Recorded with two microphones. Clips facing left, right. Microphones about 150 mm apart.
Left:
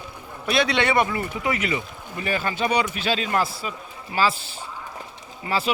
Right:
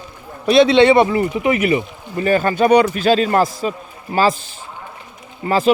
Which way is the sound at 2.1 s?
45° right (ahead or behind).